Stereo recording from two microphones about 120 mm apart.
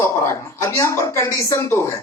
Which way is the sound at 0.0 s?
20° left (ahead or behind).